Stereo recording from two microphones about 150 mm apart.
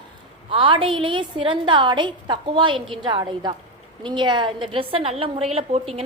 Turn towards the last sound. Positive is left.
turn(degrees=-40)  # may be behind; listen again after turning